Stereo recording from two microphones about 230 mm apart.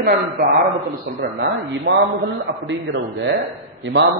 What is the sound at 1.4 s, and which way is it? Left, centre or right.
A man's voice, right.